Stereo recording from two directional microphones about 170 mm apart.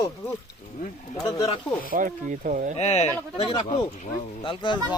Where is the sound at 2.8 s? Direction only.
40° left (ahead or behind).